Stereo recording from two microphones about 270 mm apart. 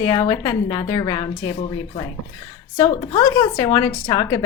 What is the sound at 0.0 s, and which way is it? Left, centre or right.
Speech, centre.